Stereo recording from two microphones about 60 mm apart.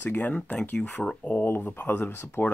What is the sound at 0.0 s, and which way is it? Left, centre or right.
Speech, left.